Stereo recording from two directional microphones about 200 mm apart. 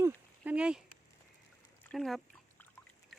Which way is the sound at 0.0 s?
5° right (ahead or behind).